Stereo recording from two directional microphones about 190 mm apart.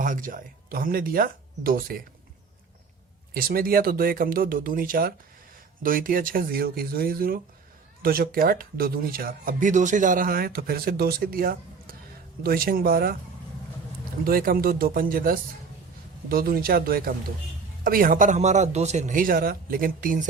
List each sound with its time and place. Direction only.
0.0 s speech: 45° right (ahead or behind)
3.3 s speech: 50° right (ahead or behind)
14.3 s speech: 50° right (ahead or behind)